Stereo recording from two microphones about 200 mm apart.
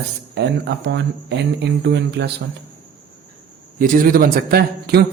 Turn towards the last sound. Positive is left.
turn(degrees=-50)  # may be behind; listen again after turning